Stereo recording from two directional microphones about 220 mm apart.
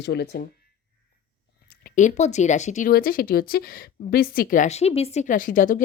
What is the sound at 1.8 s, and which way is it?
Speech, 35° left (ahead or behind).